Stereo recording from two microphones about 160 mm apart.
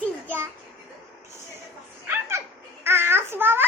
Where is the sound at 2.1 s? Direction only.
15° right (ahead or behind).